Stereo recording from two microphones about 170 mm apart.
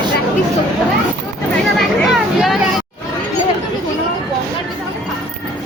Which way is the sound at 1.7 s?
Centre (ahead or behind).